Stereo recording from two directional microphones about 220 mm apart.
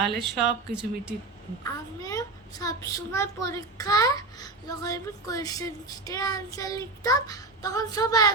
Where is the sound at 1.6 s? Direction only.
15° left (ahead or behind).